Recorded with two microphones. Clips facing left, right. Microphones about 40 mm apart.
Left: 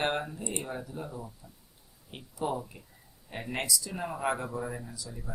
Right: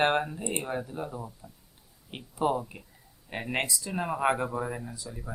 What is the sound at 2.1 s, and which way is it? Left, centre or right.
Speech, right.